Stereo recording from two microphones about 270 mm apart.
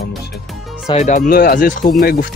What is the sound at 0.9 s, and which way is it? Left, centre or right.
Speech, left.